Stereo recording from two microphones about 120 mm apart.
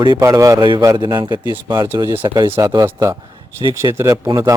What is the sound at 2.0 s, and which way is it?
Speech, 25° right (ahead or behind).